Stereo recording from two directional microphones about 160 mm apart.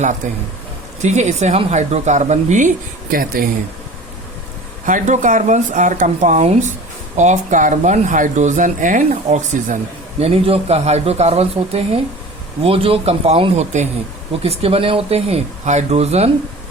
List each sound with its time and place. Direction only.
0.2 s speech: 50° right (ahead or behind)
4.9 s speech: 50° right (ahead or behind)
10.2 s speech: 40° right (ahead or behind)